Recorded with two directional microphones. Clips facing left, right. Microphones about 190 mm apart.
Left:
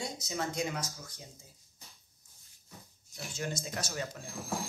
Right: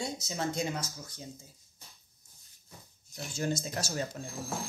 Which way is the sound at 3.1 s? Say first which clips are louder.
Right 5 dB; 35° right (ahead or behind).